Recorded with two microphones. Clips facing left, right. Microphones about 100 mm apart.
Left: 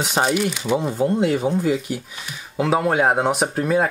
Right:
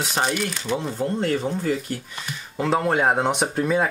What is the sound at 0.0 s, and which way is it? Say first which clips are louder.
Speech: left 4 dB; 15° left (ahead or behind).